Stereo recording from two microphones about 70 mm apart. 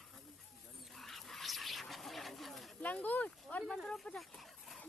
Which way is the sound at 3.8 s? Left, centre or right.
Centre.